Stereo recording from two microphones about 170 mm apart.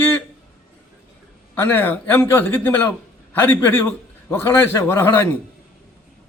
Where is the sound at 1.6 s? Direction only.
10° left (ahead or behind).